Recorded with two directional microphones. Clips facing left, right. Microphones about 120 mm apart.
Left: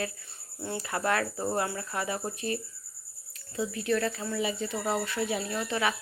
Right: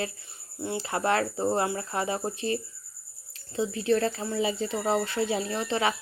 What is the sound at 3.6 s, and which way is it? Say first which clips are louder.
Speech: right 4 dB; 30° right (ahead or behind).